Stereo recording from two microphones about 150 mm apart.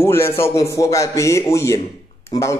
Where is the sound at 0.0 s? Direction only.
15° left (ahead or behind).